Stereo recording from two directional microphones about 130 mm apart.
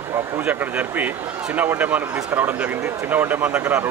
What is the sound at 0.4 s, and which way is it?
Speech, 10° right (ahead or behind).